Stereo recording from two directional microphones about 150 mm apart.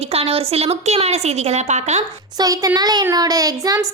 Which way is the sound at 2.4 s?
25° right (ahead or behind).